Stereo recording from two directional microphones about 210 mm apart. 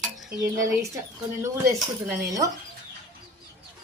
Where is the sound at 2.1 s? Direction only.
15° right (ahead or behind).